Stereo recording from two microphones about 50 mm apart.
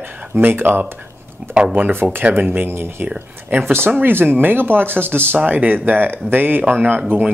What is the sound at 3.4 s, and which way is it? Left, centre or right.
Speech, right.